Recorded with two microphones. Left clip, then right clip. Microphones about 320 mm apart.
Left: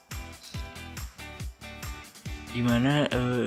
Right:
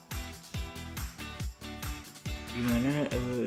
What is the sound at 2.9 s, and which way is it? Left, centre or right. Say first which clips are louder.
Music: left 6 dB; left.